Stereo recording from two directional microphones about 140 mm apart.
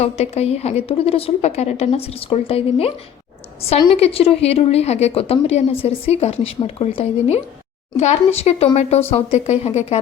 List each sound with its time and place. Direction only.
0.0 s a woman's voice: 50° left (ahead or behind)